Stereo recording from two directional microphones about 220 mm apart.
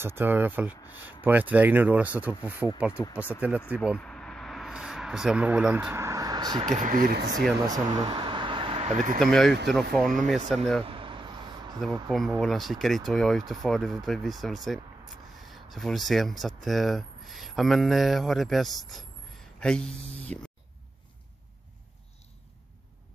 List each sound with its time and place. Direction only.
0.0 s speech: 10° right (ahead or behind)
2.9 s speech: 10° left (ahead or behind)
3.3 s speech: 5° right (ahead or behind)
6.7 s speech: 35° right (ahead or behind)
7.6 s a sound: 20° right (ahead or behind); by 9.2 s 35° right (ahead or behind)
9.2 s speech: centre (ahead or behind)
10.8 s vehicle: 25° right (ahead or behind)
12.4 s speech: centre (ahead or behind)